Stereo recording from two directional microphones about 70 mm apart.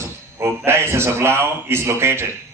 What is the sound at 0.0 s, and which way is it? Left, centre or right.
Speech, right.